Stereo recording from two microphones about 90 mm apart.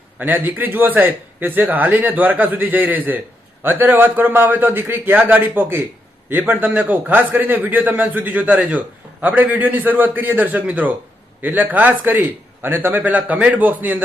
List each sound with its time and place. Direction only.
0.2 s a man's voice: 20° right (ahead or behind)